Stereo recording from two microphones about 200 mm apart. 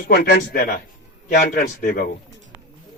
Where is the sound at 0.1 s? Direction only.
50° left (ahead or behind).